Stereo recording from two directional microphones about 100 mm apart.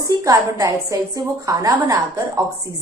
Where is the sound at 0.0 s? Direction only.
30° right (ahead or behind).